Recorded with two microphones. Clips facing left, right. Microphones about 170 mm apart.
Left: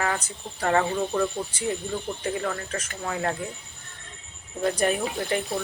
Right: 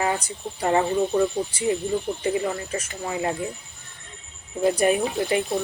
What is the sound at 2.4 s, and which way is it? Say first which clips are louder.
Speech: right 3 dB; 15° right (ahead or behind).